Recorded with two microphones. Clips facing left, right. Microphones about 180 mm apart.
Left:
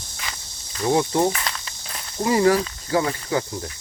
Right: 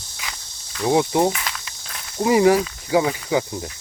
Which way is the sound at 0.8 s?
15° right (ahead or behind).